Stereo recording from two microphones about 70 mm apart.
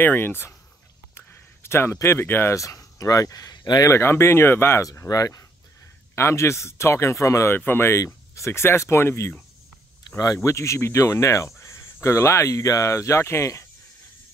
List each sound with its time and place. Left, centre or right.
0.0 s speech: left
1.1 s a sound: left
2.0 s speech: left
2.5 s speech: left
3.8 s speech: left
4.8 s speech: left
6.1 s speech: left
7.5 s speech: left
10.0 s speech: left